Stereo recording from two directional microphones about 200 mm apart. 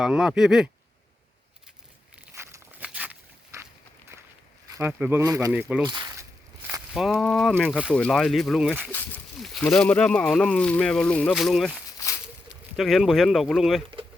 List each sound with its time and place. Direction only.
0.0 s speech: 5° right (ahead or behind)
2.1 s walk: 15° right (ahead or behind)
4.7 s speech: 10° right (ahead or behind)
5.5 s speech: 5° right (ahead or behind)
5.8 s a sound: 20° right (ahead or behind)
6.9 s speech: centre (ahead or behind)
8.9 s speech: 10° left (ahead or behind)